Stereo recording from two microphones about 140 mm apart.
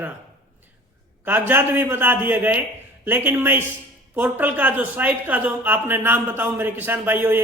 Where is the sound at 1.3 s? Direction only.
15° right (ahead or behind).